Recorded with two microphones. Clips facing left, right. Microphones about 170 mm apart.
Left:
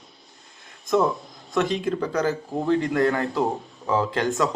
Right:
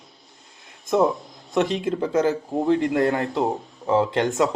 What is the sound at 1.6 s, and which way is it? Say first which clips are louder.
Speech: right 1 dB; 20° right (ahead or behind).